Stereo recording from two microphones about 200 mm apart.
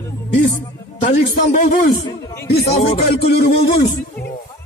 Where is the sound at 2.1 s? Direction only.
20° left (ahead or behind).